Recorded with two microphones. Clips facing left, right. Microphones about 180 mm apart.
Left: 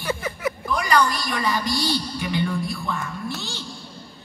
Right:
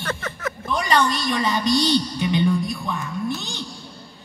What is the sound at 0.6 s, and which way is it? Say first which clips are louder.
A woman's voice: right 1 dB; 25° right (ahead or behind).